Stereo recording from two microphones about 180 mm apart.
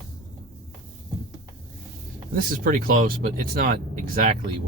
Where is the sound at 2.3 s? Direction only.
50° right (ahead or behind).